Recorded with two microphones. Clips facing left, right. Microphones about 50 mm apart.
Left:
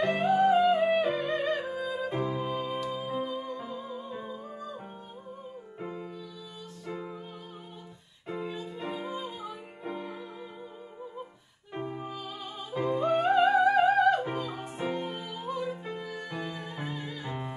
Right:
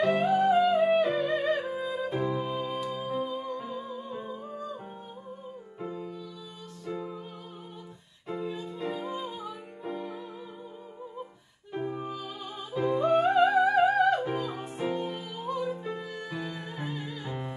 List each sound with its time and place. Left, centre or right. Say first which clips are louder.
0.2 s music: even; centre
5.9 s music: right 2 dB; left
8.3 s music: right 2 dB; centre
8.5 s music: right 2 dB; centre
11.8 s music: right 2 dB; centre